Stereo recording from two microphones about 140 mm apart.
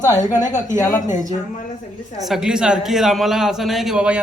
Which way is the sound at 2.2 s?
5° right (ahead or behind).